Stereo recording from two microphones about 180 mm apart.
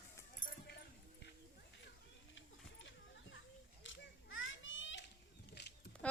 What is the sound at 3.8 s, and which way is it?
Children playing, 90° left.